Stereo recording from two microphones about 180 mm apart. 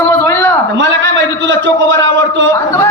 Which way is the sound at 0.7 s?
85° right.